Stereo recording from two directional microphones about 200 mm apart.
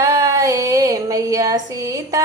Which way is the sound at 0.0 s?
15° right (ahead or behind).